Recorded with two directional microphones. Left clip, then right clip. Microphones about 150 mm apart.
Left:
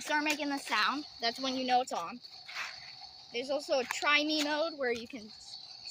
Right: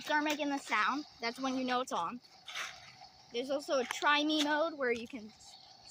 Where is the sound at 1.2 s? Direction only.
35° right (ahead or behind).